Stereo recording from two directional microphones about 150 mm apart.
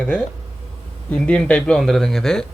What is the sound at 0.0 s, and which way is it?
Speech, 10° left (ahead or behind).